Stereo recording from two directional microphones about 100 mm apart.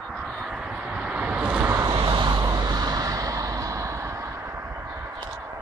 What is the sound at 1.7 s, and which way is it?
Vehicle, 45° right (ahead or behind).